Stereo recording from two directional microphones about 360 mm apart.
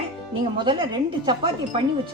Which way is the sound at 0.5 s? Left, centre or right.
Centre.